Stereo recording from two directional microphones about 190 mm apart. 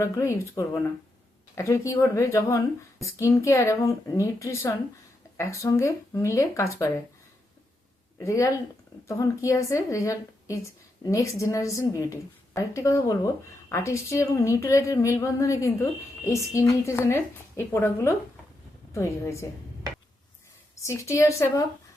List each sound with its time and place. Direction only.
0.0 s speech: 15° left (ahead or behind)
8.2 s speech: 15° left (ahead or behind)
20.8 s speech: 15° left (ahead or behind)